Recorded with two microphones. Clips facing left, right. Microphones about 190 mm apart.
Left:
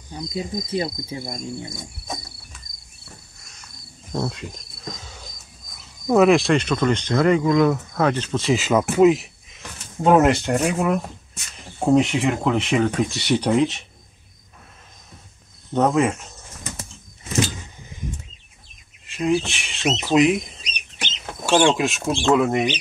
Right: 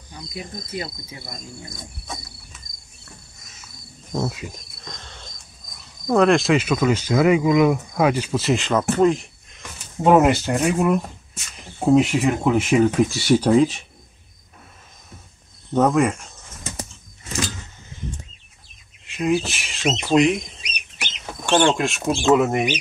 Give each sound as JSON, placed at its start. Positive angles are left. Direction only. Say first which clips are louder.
{"t": 0.2, "sound": "speech", "louder": "left 7 dB", "side_deg": 20}
{"t": 0.7, "sound": "cricket", "louder": "left 6 dB", "side_deg": 30}
{"t": 3.3, "sound": "cricket", "louder": "right 1 dB", "side_deg": -5}
{"t": 6.0, "sound": "speech", "louder": "left 1 dB", "side_deg": 5}
{"t": 15.7, "sound": "speech", "louder": "right 1 dB", "side_deg": 0}
{"t": 17.3, "sound": "vehicle", "louder": "left 4 dB", "side_deg": 15}
{"t": 19.0, "sound": "speech", "louder": "even", "side_deg": 0}
{"t": 21.5, "sound": "speech", "louder": "left 1 dB", "side_deg": 5}